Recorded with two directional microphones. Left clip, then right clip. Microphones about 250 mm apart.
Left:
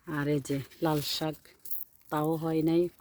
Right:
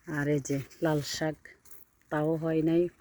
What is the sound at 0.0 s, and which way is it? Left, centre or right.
Speech, centre.